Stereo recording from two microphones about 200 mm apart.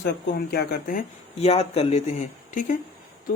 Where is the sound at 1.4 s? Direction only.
30° left (ahead or behind).